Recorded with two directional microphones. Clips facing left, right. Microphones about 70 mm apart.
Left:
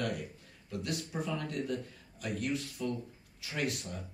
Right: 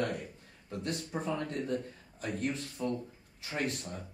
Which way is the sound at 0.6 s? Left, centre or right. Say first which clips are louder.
Right 1 dB; right.